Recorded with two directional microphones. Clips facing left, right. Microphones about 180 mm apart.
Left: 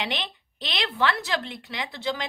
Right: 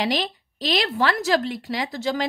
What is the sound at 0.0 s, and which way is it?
Speech, 40° right (ahead or behind).